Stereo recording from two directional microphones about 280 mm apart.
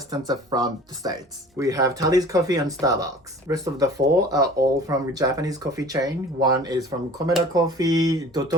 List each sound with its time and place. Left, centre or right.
0.1 s speech: centre